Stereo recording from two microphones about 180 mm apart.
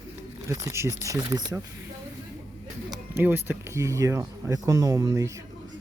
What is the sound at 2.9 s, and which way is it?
Speech, 15° right (ahead or behind).